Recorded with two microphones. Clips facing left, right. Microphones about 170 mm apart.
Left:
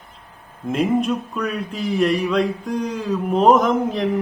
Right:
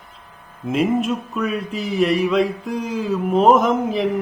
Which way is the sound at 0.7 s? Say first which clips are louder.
Even; centre (ahead or behind).